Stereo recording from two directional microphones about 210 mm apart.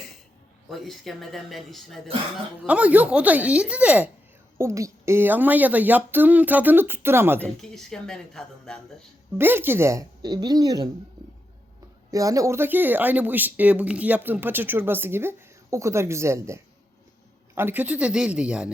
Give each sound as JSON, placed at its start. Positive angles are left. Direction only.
{"t": 0.7, "sound": "speech", "side_deg": 0}
{"t": 7.4, "sound": "speech", "side_deg": 0}
{"t": 9.4, "sound": "speech", "side_deg": -10}
{"t": 12.1, "sound": "speech", "side_deg": -15}